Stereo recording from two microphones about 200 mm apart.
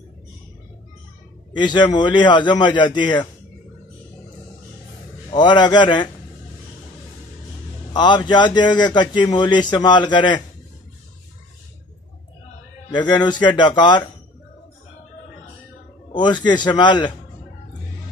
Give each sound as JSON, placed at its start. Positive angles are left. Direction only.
{"t": 1.6, "sound": "speech", "side_deg": 20}
{"t": 5.3, "sound": "speech", "side_deg": 20}
{"t": 7.9, "sound": "speech", "side_deg": 20}
{"t": 12.9, "sound": "speech", "side_deg": 20}
{"t": 16.1, "sound": "speech", "side_deg": 20}